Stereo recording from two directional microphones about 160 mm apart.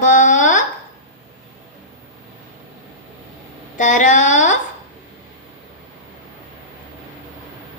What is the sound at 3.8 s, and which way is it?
Speech, 50° left (ahead or behind).